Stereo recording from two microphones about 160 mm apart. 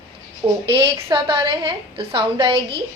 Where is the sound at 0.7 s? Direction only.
30° right (ahead or behind).